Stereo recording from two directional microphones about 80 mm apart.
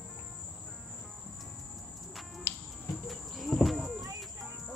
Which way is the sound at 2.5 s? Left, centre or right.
Left.